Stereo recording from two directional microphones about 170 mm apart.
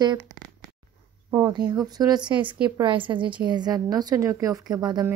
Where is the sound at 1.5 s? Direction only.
25° right (ahead or behind).